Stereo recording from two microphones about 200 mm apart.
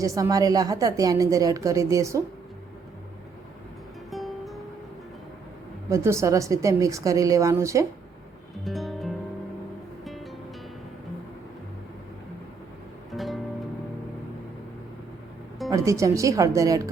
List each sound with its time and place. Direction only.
0.0 s a woman's voice: 15° right (ahead or behind)
4.1 s music: centre (ahead or behind)
5.9 s a woman's voice: 15° right (ahead or behind)
8.6 s music: centre (ahead or behind)
13.1 s music: centre (ahead or behind)
15.7 s a woman's voice: 15° right (ahead or behind)